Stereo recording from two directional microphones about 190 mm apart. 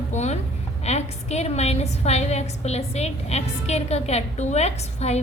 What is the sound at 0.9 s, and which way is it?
A woman's voice, 35° left (ahead or behind).